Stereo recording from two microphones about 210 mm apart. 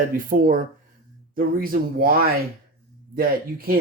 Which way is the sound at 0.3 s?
40° right (ahead or behind).